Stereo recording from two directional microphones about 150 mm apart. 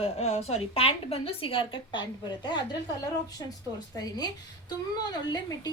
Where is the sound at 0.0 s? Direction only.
45° left (ahead or behind).